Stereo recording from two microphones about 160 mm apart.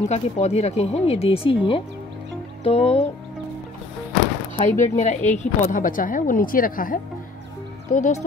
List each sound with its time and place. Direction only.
0.0 s speech: 45° left (ahead or behind)
4.6 s a woman's voice: 50° left (ahead or behind)
7.9 s speech: 50° left (ahead or behind)